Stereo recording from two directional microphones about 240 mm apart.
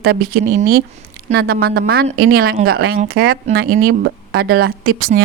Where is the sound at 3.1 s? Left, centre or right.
Right.